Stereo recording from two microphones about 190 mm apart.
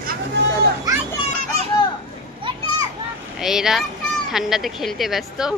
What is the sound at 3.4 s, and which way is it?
Speech, centre (ahead or behind).